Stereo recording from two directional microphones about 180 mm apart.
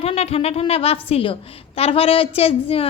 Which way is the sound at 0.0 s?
35° left (ahead or behind).